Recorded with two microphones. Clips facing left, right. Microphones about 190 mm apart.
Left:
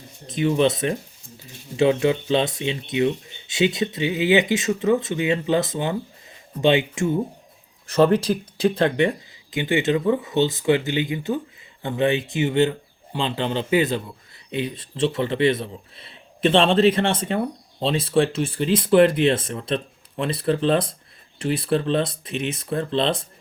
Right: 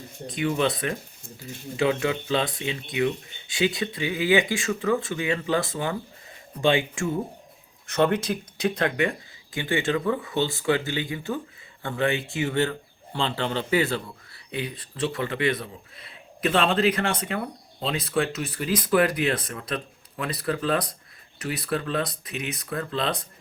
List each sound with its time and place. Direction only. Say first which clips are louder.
0.3 s speech: left 5 dB; 20° left (ahead or behind)
7.9 s a man's voice: left 5 dB; 35° left (ahead or behind)